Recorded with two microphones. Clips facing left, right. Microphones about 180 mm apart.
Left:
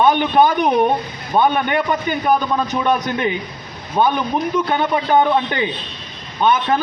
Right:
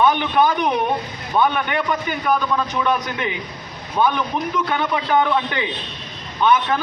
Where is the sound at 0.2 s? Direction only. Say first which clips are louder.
Left 3 dB; 35° left (ahead or behind).